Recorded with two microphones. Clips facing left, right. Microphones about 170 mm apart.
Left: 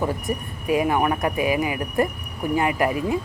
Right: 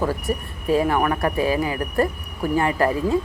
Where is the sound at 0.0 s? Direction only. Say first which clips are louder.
Right 1 dB; 15° left (ahead or behind).